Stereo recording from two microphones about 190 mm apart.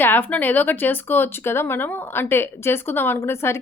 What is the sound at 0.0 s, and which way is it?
Speech, 10° left (ahead or behind).